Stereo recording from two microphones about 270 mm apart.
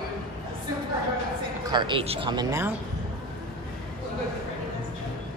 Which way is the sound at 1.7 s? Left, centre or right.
Centre.